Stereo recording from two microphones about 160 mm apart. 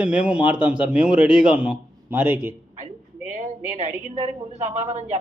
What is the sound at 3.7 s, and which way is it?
A woman's voice, 45° right (ahead or behind).